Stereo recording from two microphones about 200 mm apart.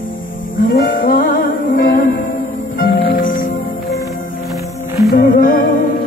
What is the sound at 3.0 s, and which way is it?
Music, 45° left (ahead or behind).